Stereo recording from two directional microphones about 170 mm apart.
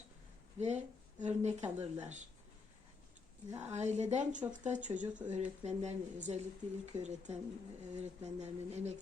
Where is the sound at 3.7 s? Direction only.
40° right (ahead or behind).